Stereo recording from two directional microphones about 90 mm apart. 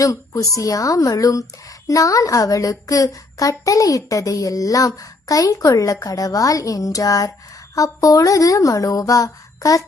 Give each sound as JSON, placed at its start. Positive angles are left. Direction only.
{"t": 0.0, "sound": "a woman's voice", "side_deg": 40}